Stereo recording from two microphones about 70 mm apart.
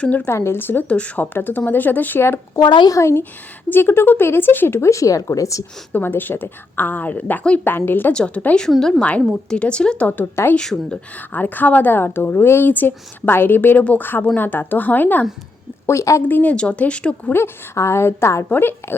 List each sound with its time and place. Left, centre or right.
0.0 s speech: centre
0.3 s speech: left
0.9 s speech: centre; by 5.6 s left
5.9 s speech: left
8.1 s speech: centre
11.3 s speech: left
15.9 s a woman's voice: left
16.3 s speech: left
17.3 s speech: left
18.4 s speech: left